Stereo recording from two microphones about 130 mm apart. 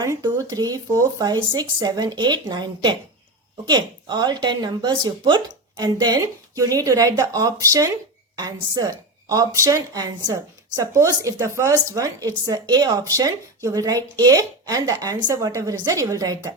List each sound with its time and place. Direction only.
0.0 s speech: 25° right (ahead or behind)